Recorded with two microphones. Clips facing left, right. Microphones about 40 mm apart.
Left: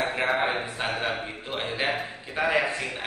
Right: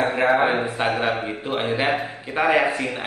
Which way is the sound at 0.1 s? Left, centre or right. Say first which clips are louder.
Right 7 dB; centre.